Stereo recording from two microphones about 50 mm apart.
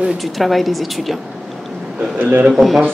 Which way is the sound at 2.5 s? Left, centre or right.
Centre.